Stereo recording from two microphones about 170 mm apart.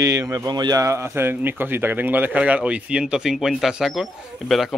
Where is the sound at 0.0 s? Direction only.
20° right (ahead or behind).